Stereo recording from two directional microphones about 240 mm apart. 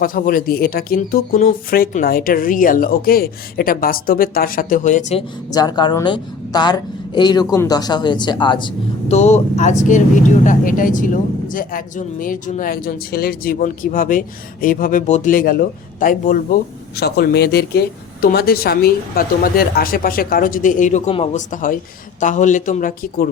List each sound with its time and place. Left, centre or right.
0.0 s speech: left
5.5 s a woman's voice: centre; by 23.3 s left